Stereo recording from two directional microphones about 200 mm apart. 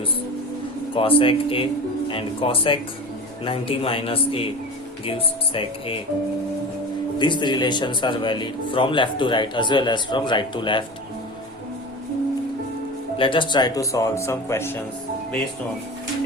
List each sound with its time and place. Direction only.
0.9 s speech: 25° left (ahead or behind)
7.2 s speech: 25° left (ahead or behind)
13.1 s speech: 25° left (ahead or behind)